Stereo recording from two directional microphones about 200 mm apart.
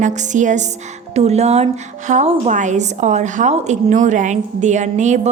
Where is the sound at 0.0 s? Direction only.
35° right (ahead or behind).